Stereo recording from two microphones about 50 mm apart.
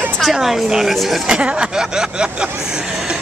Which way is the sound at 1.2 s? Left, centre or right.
Right.